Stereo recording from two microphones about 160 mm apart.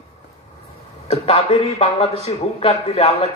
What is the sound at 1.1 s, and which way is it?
A man's voice, 40° left (ahead or behind).